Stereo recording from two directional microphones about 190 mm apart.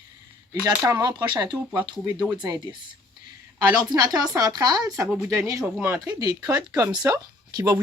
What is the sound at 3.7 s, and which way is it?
Speech, 20° right (ahead or behind).